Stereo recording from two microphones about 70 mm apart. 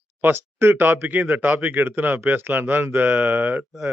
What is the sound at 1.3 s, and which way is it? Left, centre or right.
Speech, right.